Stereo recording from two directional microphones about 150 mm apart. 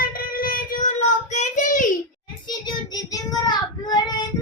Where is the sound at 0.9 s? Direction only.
50° left (ahead or behind).